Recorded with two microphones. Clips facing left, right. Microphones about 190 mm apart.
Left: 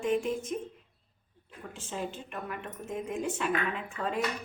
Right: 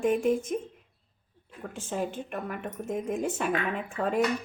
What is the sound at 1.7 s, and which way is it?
Speech, 50° right (ahead or behind).